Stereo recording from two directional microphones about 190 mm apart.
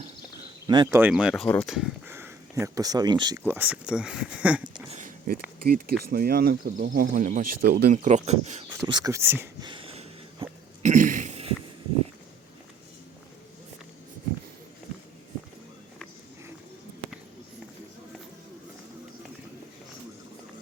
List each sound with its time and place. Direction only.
0.7 s speech: 25° right (ahead or behind)
0.9 s speech: 5° right (ahead or behind)
1.5 s speech: 10° left (ahead or behind)
1.7 s speech: 5° right (ahead or behind)
3.4 s speech: 10° right (ahead or behind)
4.9 s speech: 40° right (ahead or behind)
8.9 s speech: 20° right (ahead or behind)
9.6 s a sound: 30° right (ahead or behind)